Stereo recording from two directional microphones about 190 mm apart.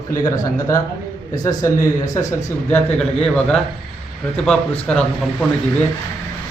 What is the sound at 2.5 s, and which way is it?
A man's voice, 10° left (ahead or behind).